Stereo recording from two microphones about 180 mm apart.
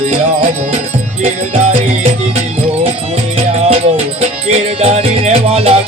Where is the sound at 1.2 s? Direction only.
40° right (ahead or behind).